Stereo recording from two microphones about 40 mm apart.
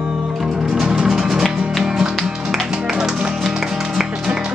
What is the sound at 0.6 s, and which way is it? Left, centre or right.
Music, centre.